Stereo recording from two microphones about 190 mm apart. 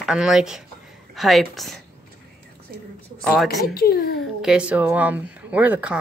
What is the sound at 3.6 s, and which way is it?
Speech, 55° left (ahead or behind).